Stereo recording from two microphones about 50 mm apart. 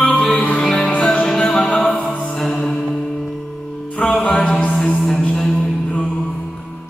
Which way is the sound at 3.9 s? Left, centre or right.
Centre.